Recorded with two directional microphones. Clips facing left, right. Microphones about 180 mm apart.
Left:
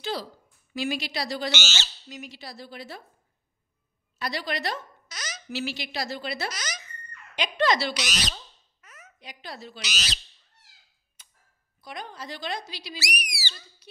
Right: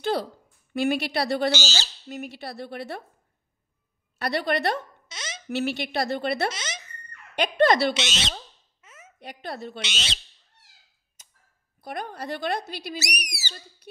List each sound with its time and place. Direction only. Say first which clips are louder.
0.0 s speech: right 6 dB; 60° right (ahead or behind)
1.5 s bird: right 4 dB; 35° right (ahead or behind)
2.0 s speech: right 6 dB; 60° right (ahead or behind)
4.2 s speech: right 6 dB; 60° right (ahead or behind)
5.0 s a sound: right 1 dB; 25° right (ahead or behind)
5.5 s speech: right 6 dB; 60° right (ahead or behind)
6.5 s a child's voice: right 1 dB; 25° right (ahead or behind)
7.3 s speech: right 5 dB; 55° right (ahead or behind)
7.9 s speech: right 3 dB; 25° right (ahead or behind)
8.8 s a sound: right 2 dB; 25° right (ahead or behind)
9.2 s speech: right 6 dB; 55° right (ahead or behind)
9.8 s speech: right 3 dB; 25° right (ahead or behind)
11.2 s a sound: right 1 dB; 45° right (ahead or behind)
11.8 s speech: right 5 dB; 55° right (ahead or behind)